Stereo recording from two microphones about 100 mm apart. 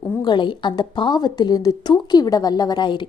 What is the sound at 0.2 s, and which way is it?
A woman's voice, 50° left (ahead or behind).